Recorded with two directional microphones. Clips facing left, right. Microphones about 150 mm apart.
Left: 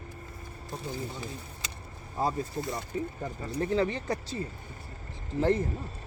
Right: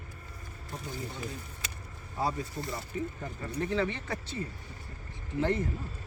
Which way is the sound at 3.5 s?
35° left (ahead or behind).